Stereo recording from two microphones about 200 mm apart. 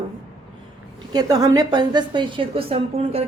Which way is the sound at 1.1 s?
20° right (ahead or behind).